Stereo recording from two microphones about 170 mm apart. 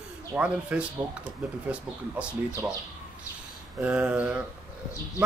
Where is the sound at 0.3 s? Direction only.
5° right (ahead or behind).